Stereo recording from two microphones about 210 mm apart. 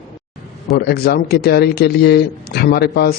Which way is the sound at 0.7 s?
45° left (ahead or behind).